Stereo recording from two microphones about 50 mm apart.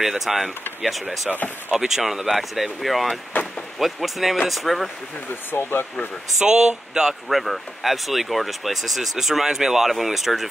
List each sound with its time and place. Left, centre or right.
0.0 s speech: centre
5.5 s speech: left
6.4 s speech: centre
7.2 s speech: centre